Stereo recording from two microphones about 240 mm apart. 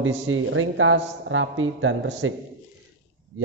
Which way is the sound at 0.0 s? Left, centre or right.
Right.